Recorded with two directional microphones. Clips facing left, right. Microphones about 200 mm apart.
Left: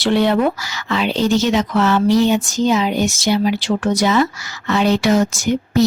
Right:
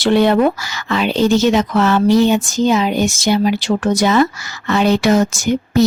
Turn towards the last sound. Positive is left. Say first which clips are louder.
# right 1 dB
turn(degrees=-50)  # may be behind; listen again after turning